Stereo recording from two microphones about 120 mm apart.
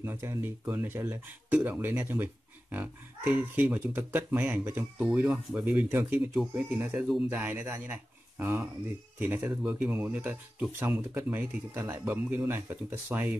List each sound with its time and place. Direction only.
0.0 s speech: 20° right (ahead or behind)